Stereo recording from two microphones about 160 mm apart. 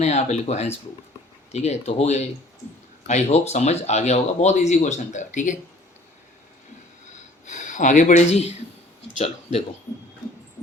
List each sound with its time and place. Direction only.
0.0 s speech: 45° left (ahead or behind)
7.4 s speech: 50° left (ahead or behind)